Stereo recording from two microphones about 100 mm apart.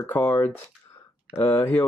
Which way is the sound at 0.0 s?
20° left (ahead or behind).